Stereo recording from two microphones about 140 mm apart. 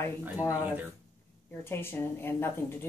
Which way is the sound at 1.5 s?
15° left (ahead or behind).